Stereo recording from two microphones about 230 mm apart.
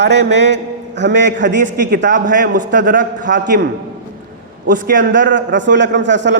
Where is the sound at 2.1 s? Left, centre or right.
Right.